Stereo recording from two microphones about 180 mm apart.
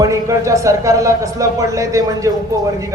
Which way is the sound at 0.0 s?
15° right (ahead or behind).